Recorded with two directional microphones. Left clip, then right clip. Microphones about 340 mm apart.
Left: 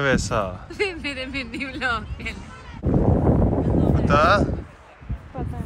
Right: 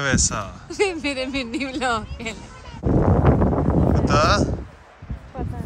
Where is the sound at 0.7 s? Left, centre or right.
Centre.